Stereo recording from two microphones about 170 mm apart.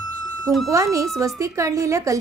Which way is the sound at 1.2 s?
20° right (ahead or behind).